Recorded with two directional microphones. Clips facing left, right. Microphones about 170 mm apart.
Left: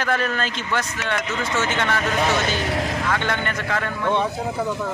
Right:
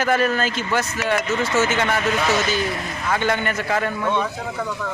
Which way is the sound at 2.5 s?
80° left.